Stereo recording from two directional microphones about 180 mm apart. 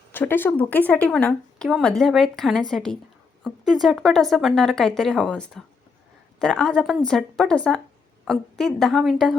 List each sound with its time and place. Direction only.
0.1 s speech: 10° left (ahead or behind)